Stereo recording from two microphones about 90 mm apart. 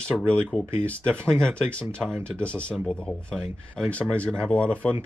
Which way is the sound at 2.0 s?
10° left (ahead or behind).